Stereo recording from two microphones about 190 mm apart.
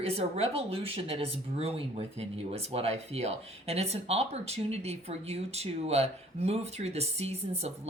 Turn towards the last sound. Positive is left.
turn(degrees=-35)  # may be behind; listen again after turning